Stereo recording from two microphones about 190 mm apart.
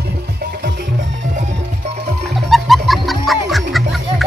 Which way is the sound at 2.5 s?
Centre (ahead or behind).